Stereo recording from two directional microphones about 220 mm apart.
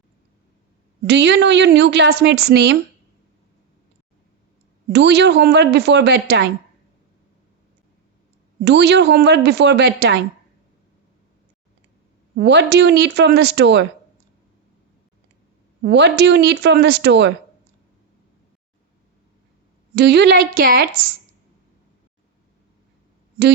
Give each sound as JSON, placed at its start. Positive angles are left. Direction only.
{"t": 1.0, "sound": "a woman's voice", "side_deg": -50}
{"t": 4.9, "sound": "a woman's voice", "side_deg": -50}
{"t": 8.6, "sound": "a woman's voice", "side_deg": -50}
{"t": 12.4, "sound": "a woman's voice", "side_deg": -50}
{"t": 15.8, "sound": "a woman's voice", "side_deg": -50}
{"t": 20.0, "sound": "a woman's voice", "side_deg": -50}